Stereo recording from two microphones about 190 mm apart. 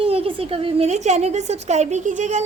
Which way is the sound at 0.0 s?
30° right (ahead or behind).